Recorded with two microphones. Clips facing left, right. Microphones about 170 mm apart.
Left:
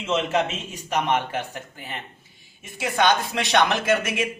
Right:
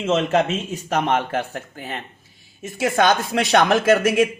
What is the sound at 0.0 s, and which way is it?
Speech, 50° right (ahead or behind).